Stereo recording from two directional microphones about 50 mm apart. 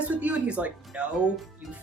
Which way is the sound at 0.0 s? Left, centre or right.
Right.